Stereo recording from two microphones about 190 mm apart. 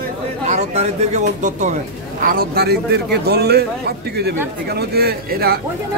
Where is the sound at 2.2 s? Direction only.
50° right (ahead or behind).